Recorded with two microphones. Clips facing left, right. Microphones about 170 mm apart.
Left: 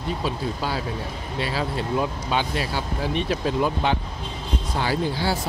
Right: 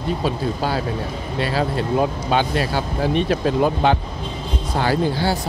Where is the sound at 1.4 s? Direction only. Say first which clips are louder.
Right 5 dB; 55° right (ahead or behind).